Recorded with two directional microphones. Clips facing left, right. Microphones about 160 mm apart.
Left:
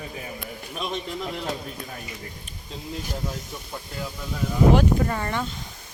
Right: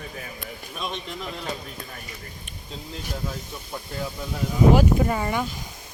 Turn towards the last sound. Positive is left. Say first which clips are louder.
# right 2 dB
turn(degrees=-10)  # may be behind; listen again after turning